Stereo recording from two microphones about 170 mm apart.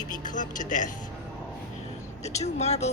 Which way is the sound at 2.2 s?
40° left (ahead or behind).